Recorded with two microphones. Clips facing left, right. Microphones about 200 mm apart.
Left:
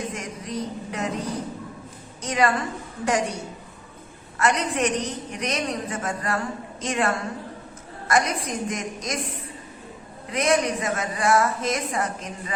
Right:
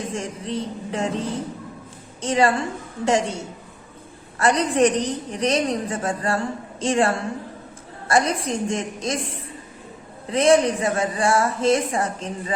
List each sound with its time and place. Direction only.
0.1 s a woman's voice: 30° right (ahead or behind)